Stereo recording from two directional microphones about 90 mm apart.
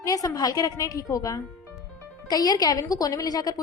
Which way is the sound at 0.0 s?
40° left (ahead or behind).